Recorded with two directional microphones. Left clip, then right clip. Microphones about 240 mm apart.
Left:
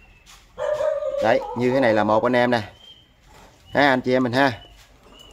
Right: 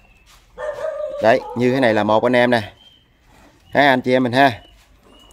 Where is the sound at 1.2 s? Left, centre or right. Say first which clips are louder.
Right 6 dB; right.